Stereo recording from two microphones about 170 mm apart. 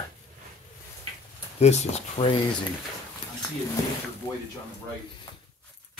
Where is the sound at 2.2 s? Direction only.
30° left (ahead or behind).